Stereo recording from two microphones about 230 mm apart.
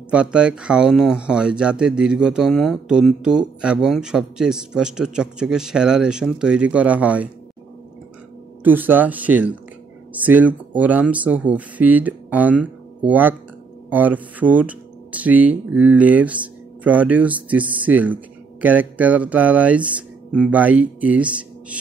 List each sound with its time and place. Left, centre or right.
0.1 s speech: centre
8.6 s speech: centre